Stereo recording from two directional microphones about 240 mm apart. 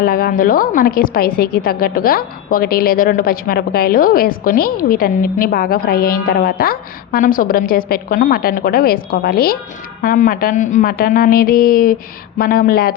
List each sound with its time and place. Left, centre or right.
0.0 s a woman's voice: left